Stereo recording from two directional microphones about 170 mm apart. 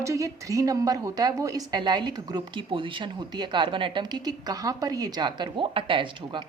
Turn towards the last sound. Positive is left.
turn(degrees=-30)  # may be behind; listen again after turning